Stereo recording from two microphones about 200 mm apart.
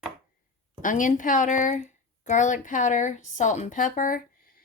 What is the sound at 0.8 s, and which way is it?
Speech, 40° left (ahead or behind).